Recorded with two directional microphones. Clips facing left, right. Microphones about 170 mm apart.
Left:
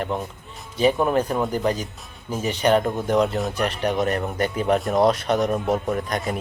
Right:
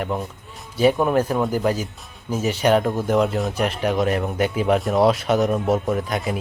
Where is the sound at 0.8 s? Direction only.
5° right (ahead or behind).